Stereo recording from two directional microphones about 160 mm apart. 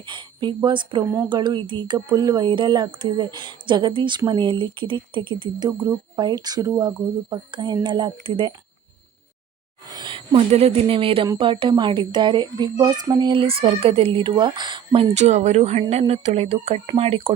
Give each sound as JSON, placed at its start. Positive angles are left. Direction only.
{"t": 0.0, "sound": "speech", "side_deg": -30}
{"t": 9.9, "sound": "speech", "side_deg": -30}
{"t": 15.1, "sound": "speech", "side_deg": -45}